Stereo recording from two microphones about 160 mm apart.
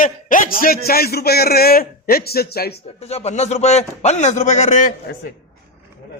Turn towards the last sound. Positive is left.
turn(degrees=50)  # may be behind; listen again after turning